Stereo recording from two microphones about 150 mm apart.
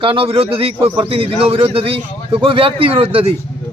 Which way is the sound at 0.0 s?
35° right (ahead or behind).